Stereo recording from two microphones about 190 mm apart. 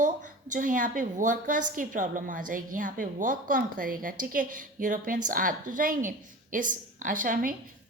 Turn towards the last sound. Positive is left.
turn(degrees=-45)  # may be behind; listen again after turning